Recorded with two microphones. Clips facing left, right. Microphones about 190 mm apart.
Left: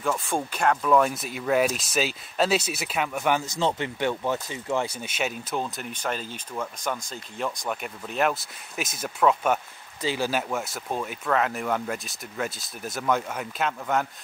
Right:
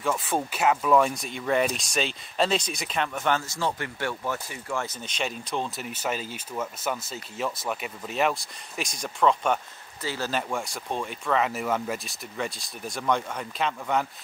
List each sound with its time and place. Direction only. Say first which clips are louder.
0.0 s speech: even; 5° right (ahead or behind); by 4.8 s 20° left (ahead or behind)
4.8 s speech: left 2 dB; 10° left (ahead or behind)